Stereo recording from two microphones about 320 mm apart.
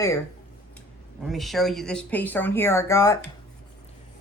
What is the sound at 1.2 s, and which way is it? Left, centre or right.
Speech, centre.